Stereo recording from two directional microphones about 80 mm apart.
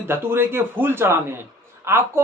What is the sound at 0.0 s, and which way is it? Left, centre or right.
Speech, right.